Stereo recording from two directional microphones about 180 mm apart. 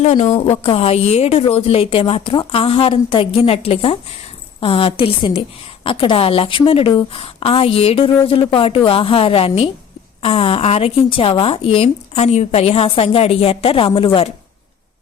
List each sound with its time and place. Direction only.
0.0 s speech: 40° left (ahead or behind)